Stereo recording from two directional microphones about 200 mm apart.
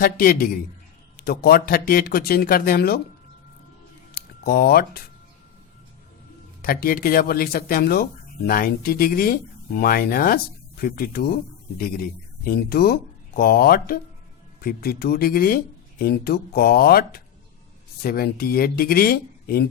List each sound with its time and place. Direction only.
0.0 s speech: 45° left (ahead or behind)
4.1 s speech: 50° left (ahead or behind)
6.6 s speech: 45° left (ahead or behind)